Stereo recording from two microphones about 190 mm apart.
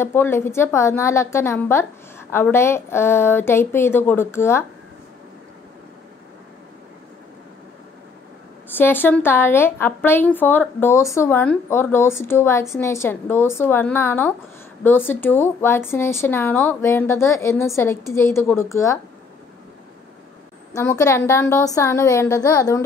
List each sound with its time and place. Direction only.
0.0 s a woman's voice: 10° left (ahead or behind)
8.6 s a woman's voice: 10° left (ahead or behind)
20.7 s a woman's voice: 15° left (ahead or behind)